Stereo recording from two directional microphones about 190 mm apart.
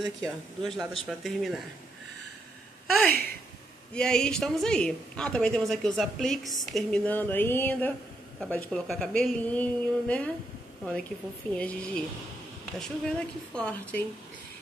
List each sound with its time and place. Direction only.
0.0 s a woman's voice: centre (ahead or behind)
3.1 s speech: 55° right (ahead or behind)
3.9 s a woman's voice: 5° left (ahead or behind)
11.5 s a woman's voice: 5° left (ahead or behind)